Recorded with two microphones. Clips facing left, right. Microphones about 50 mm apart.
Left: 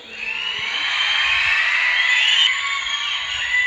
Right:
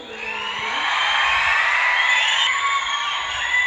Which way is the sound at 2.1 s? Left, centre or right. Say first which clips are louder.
Left 1 dB; left.